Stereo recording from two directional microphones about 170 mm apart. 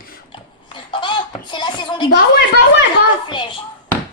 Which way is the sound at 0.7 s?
30° left (ahead or behind).